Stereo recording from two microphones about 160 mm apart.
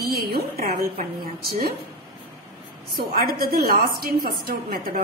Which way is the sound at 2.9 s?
70° right (ahead or behind).